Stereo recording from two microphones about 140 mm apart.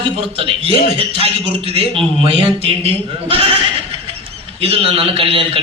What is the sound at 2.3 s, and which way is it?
Speech, 45° right (ahead or behind).